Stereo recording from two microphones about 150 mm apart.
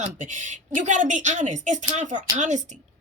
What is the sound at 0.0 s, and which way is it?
A woman's voice, 55° right (ahead or behind).